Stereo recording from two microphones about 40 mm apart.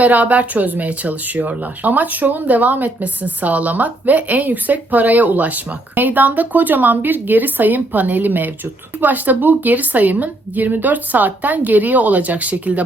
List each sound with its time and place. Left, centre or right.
0.0 s speech: right